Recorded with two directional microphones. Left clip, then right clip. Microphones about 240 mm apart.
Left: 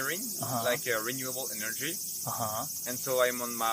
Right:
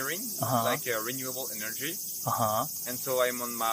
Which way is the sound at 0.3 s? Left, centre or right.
Right.